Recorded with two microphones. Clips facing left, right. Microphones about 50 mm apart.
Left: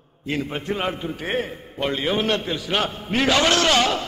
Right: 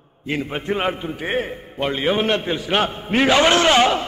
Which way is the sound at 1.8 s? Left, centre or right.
Centre.